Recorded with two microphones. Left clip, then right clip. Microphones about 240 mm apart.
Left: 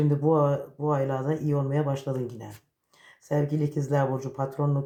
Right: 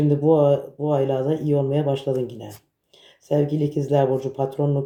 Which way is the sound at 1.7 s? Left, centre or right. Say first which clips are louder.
Right 7 dB; centre.